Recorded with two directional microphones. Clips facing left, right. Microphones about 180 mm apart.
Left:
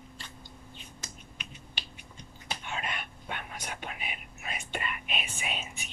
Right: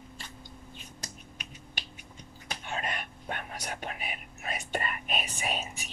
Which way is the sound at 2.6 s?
40° right (ahead or behind).